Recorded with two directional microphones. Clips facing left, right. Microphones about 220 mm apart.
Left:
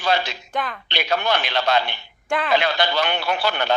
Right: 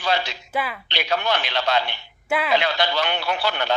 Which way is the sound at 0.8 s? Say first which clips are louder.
Left 3 dB; 50° left (ahead or behind).